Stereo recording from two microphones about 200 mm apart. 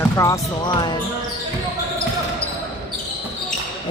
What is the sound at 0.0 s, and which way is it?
Speech, 15° left (ahead or behind).